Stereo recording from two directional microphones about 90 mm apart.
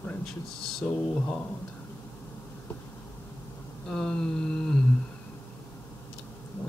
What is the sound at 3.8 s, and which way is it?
Humming, 10° left (ahead or behind).